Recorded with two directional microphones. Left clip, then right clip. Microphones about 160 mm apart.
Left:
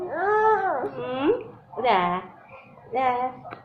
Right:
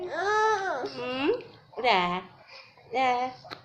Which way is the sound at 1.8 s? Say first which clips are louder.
Left 3 dB; 30° right (ahead or behind).